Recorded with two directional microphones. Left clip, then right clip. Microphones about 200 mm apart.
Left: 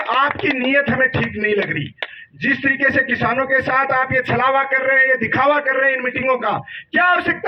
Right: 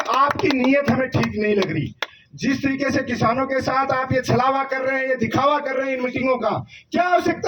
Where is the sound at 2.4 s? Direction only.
15° left (ahead or behind).